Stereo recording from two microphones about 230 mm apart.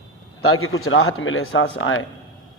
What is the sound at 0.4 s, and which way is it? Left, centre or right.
Speech, left.